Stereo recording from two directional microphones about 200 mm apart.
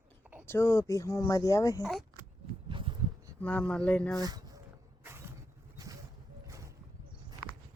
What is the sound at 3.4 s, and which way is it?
Speech, 5° left (ahead or behind).